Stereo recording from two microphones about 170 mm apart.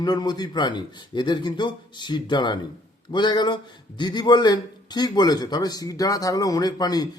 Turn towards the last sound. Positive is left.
turn(degrees=25)  # may be behind; listen again after turning